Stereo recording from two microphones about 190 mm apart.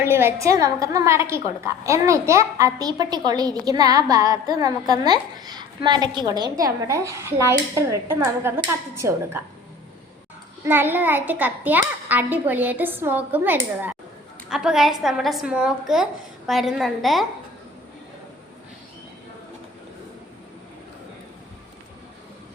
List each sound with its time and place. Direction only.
0.0 s a woman's voice: 10° right (ahead or behind)
10.7 s a woman's voice: 10° right (ahead or behind)